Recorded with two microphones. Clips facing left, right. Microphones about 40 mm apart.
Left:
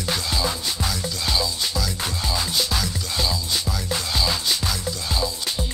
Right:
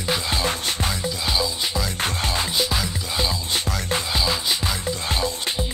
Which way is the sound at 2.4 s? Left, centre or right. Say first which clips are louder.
Right 1 dB; centre.